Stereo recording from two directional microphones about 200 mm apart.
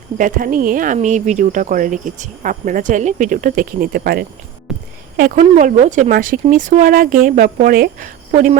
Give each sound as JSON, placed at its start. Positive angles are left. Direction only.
{"t": 0.2, "sound": "speech", "side_deg": -40}